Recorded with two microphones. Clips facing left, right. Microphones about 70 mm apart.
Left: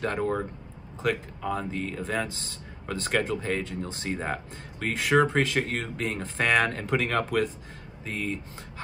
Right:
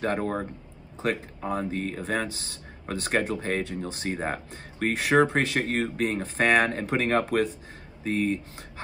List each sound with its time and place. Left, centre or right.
0.0 s speech: right